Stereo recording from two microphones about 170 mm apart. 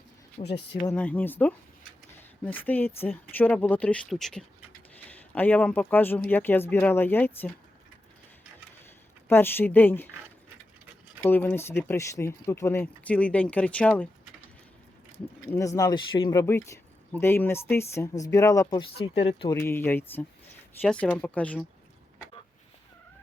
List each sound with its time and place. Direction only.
0.4 s speech: 35° left (ahead or behind)
0.9 s speech: 10° left (ahead or behind)
9.3 s speech: 15° left (ahead or behind)
11.2 s speech: 10° left (ahead or behind)
15.5 s speech: 20° left (ahead or behind)
16.4 s speech: 15° left (ahead or behind)